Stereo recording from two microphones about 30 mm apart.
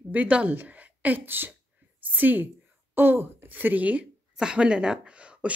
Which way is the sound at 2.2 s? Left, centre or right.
Right.